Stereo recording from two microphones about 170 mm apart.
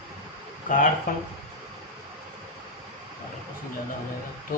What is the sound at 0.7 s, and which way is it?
Speech, 50° left (ahead or behind).